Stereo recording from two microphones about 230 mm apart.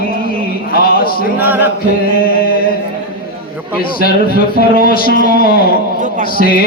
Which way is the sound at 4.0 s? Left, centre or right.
Left.